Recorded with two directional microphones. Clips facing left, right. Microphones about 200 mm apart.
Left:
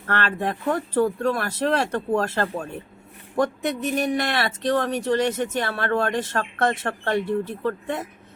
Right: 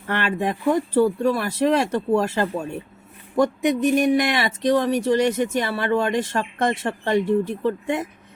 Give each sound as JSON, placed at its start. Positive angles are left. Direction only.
{"t": 0.1, "sound": "speech", "side_deg": -15}